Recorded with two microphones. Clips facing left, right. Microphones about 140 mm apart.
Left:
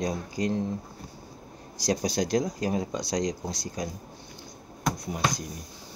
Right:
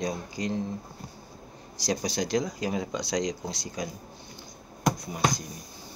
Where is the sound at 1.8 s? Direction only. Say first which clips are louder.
Left 2 dB; 55° left (ahead or behind).